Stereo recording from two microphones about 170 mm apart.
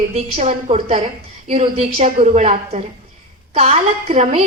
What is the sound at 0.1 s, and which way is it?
A woman's voice, 35° right (ahead or behind).